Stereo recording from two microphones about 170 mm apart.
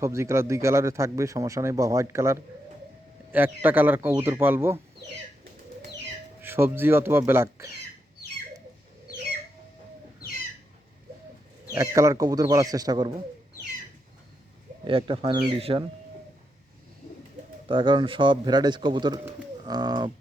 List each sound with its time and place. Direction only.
0.0 s speech: 15° right (ahead or behind)
6.4 s speech: 15° right (ahead or behind)
11.7 s speech: 20° right (ahead or behind)
14.8 s speech: 30° right (ahead or behind)
17.7 s speech: 30° right (ahead or behind)